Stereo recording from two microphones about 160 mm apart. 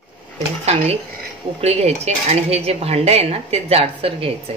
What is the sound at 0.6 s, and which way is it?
Dishes, 40° right (ahead or behind).